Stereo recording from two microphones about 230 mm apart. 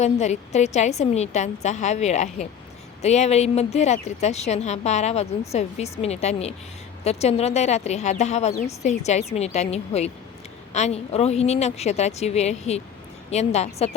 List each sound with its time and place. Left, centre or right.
0.0 s a woman's voice: left